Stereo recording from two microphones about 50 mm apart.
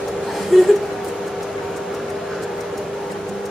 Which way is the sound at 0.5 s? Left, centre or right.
Centre.